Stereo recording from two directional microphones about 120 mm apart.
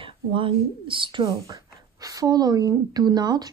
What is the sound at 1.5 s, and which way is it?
A woman's voice, 30° right (ahead or behind).